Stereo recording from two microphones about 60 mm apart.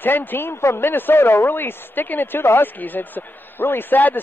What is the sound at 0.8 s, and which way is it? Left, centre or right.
A man's voice, left.